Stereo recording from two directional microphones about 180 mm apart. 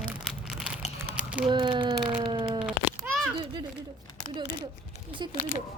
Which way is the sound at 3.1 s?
10° right (ahead or behind).